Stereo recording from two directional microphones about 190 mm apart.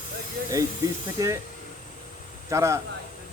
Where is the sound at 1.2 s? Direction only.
15° right (ahead or behind).